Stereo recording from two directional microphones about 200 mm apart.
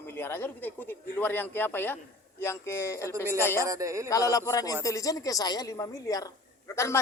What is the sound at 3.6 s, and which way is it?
Speech, 15° right (ahead or behind).